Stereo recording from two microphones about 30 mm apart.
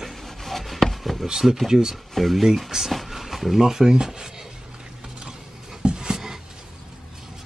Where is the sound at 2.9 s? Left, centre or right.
Centre.